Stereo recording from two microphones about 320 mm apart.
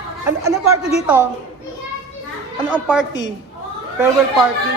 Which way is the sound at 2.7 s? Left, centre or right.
Centre.